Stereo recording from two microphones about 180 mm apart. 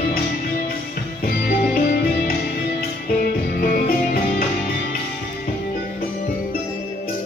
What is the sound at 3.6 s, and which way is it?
Music, 55° left (ahead or behind).